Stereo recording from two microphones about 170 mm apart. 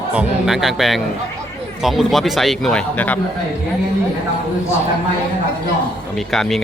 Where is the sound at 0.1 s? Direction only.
5° right (ahead or behind).